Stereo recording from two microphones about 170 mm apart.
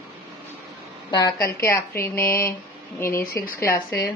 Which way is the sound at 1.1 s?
25° left (ahead or behind).